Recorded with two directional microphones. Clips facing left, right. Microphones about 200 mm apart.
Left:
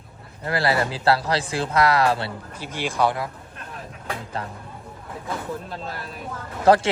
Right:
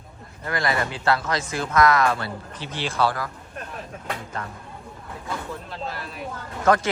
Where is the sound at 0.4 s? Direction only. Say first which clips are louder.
Left 3 dB; 30° left (ahead or behind).